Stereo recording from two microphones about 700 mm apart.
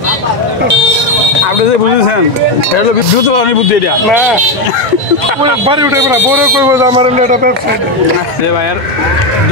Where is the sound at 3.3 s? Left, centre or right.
Left.